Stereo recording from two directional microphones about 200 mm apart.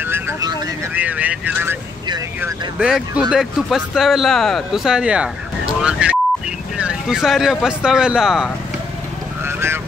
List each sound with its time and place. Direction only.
0.0 s vehicle: 10° right (ahead or behind)
0.9 s speech: 10° right (ahead or behind)
2.0 s speech: 20° right (ahead or behind)
2.8 s speech: 5° right (ahead or behind)
9.4 s vehicle: 10° right (ahead or behind)